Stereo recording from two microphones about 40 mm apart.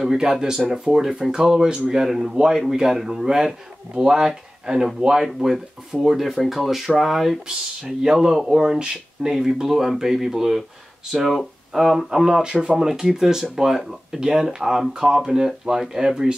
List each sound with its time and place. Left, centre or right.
0.0 s speech: centre
7.4 s speech: centre